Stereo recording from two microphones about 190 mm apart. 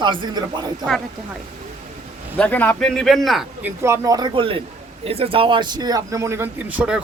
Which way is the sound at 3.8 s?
15° right (ahead or behind).